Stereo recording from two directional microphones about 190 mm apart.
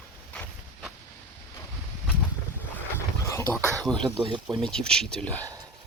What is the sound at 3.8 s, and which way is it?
Speech, 5° left (ahead or behind).